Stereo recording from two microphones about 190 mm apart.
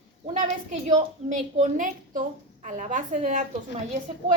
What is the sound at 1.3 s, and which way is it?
A woman's voice, 40° right (ahead or behind).